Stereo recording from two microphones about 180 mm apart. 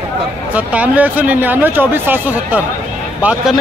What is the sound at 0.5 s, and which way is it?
Speech, 10° right (ahead or behind).